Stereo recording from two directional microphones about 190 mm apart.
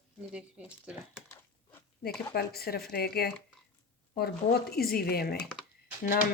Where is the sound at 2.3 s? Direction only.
55° left (ahead or behind).